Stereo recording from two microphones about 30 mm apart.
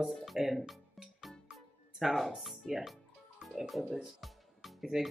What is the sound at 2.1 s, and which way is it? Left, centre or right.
Speech, centre.